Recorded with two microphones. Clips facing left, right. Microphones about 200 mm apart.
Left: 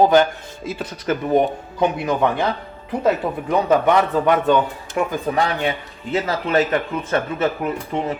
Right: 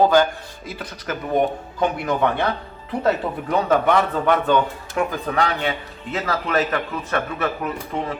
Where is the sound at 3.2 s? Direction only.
20° left (ahead or behind).